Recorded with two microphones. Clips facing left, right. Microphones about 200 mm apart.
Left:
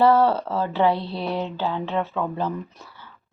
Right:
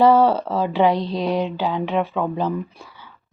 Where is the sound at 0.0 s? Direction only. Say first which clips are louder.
Right 3 dB; 15° right (ahead or behind).